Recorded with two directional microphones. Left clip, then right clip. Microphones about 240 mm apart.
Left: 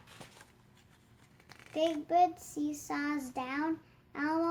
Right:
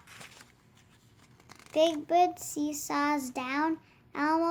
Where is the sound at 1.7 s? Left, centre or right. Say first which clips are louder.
Right 4 dB; right.